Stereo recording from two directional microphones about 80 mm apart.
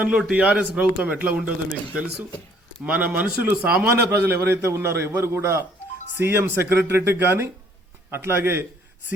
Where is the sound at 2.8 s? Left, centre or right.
Centre.